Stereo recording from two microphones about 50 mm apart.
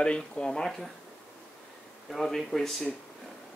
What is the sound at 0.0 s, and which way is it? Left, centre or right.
Speech, centre.